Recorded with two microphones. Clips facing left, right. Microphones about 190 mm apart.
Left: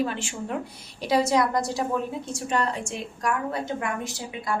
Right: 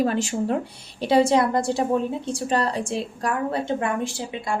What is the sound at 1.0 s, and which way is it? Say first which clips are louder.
A woman's voice: right 4 dB; 30° right (ahead or behind).